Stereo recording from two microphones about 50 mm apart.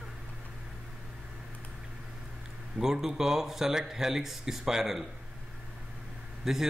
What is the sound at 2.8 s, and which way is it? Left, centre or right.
A man's voice, centre.